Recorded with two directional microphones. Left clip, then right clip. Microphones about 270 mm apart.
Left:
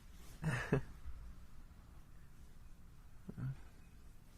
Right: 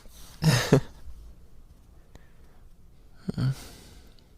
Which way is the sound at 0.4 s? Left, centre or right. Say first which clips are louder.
Right 16 dB; right.